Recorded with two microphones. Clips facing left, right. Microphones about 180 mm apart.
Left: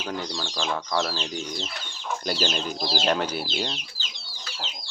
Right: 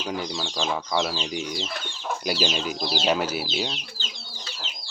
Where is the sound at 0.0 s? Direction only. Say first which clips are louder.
Right 2 dB; 10° right (ahead or behind).